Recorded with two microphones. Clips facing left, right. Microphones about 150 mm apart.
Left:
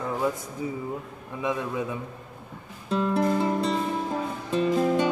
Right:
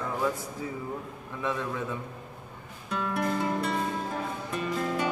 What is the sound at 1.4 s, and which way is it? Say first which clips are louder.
Speech: left 3 dB; 15° left (ahead or behind).